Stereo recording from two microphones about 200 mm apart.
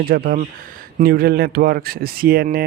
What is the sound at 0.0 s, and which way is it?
Speech, 45° right (ahead or behind).